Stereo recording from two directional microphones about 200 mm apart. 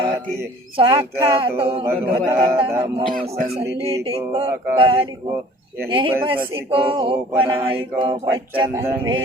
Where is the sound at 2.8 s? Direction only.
45° right (ahead or behind).